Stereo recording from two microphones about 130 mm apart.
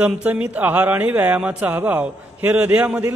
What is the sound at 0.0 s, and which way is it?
A man's voice, 10° right (ahead or behind).